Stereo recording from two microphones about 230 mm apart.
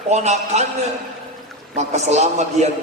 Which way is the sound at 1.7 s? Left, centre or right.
Right.